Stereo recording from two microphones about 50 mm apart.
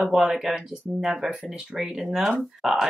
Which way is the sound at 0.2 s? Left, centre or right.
Centre.